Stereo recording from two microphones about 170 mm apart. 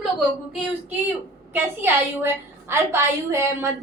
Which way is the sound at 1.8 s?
15° right (ahead or behind).